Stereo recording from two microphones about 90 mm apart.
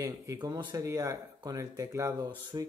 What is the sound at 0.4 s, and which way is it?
Speech, 50° right (ahead or behind).